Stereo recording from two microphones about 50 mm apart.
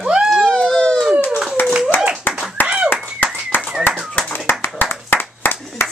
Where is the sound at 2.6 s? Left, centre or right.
Left.